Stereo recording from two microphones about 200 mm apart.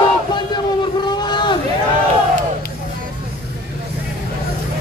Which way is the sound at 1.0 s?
20° left (ahead or behind).